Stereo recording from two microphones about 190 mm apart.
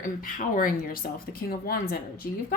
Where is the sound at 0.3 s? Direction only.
45° left (ahead or behind).